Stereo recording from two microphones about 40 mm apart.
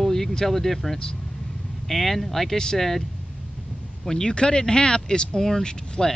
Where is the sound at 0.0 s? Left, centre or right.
Centre.